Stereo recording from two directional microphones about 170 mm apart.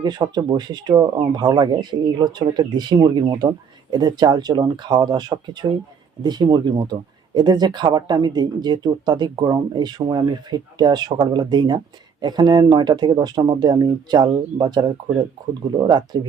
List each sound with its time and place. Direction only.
0.0 s speech: 25° right (ahead or behind)